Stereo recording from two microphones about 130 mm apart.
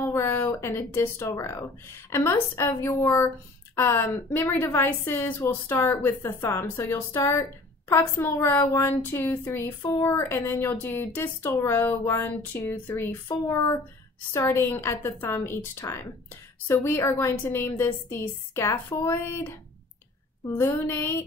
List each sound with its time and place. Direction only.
0.0 s a woman's voice: 20° left (ahead or behind)